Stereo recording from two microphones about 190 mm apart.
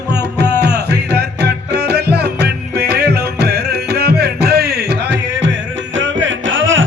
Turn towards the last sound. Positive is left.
turn(degrees=-90)